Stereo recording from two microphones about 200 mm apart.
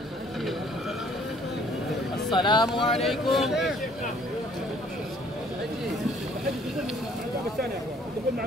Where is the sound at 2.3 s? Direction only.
20° left (ahead or behind).